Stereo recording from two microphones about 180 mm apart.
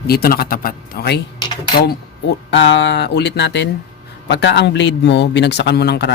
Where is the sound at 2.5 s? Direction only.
80° left.